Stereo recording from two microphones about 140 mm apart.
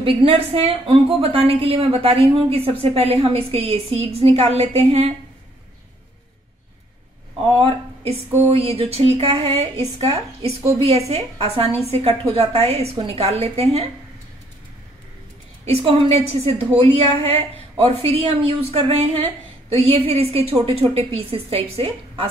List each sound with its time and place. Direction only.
0.0 s a woman's voice: 40° right (ahead or behind)
7.6 s a woman's voice: 45° right (ahead or behind)
15.6 s a woman's voice: 45° right (ahead or behind)